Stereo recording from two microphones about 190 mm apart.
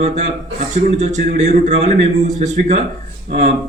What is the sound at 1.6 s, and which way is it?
A man's voice, 35° right (ahead or behind).